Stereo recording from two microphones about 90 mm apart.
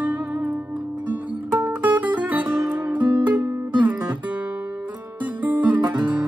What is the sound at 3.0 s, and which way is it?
Music, 55° right (ahead or behind).